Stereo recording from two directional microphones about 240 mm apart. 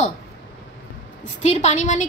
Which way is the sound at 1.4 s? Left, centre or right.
Left.